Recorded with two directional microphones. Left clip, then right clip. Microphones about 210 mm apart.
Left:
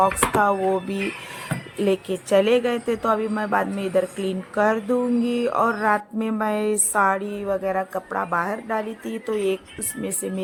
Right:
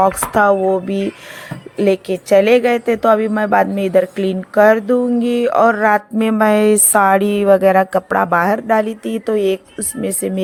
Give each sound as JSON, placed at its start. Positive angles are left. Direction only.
{"t": 0.0, "sound": "a woman's voice", "side_deg": -25}